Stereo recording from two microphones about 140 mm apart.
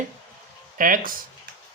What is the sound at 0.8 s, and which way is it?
Speech, 80° right.